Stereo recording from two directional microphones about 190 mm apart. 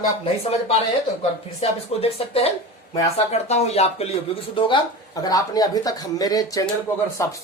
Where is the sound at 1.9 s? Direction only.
30° left (ahead or behind).